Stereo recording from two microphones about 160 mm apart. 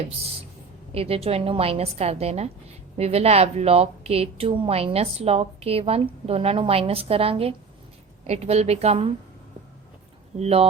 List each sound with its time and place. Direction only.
0.9 s a woman's voice: 40° right (ahead or behind)
10.3 s a woman's voice: 40° right (ahead or behind)